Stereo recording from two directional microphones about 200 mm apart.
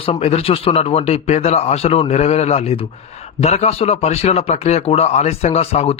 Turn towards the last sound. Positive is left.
turn(degrees=30)  # may be behind; listen again after turning